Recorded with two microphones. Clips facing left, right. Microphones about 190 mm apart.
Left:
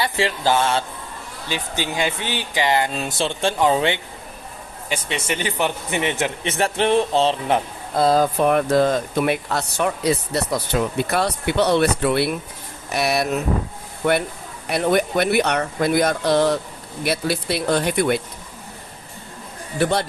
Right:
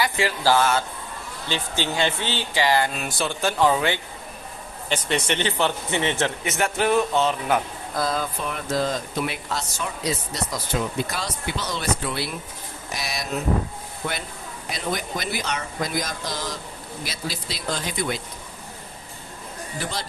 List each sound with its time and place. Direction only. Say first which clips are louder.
0.0 s speech: left 1 dB; 25° left (ahead or behind)
1.5 s speech: left 1 dB; 10° left (ahead or behind)
4.9 s a man's voice: right 1 dB; 5° left (ahead or behind)
6.4 s speech: left 6 dB; 30° left (ahead or behind)
8.2 s speech: left 12 dB; 55° left (ahead or behind)
14.7 s speech: left 10 dB; 60° left (ahead or behind)
19.8 s speech: left 12 dB; 65° left (ahead or behind)